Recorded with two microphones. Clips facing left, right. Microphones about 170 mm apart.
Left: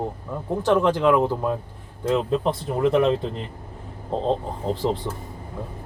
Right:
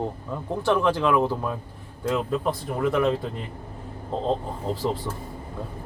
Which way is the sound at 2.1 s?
25° left (ahead or behind).